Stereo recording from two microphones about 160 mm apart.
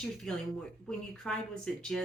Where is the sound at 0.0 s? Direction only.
5° left (ahead or behind).